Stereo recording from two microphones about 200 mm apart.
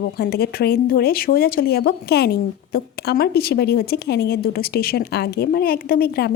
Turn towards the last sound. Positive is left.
turn(degrees=50)  # may be behind; listen again after turning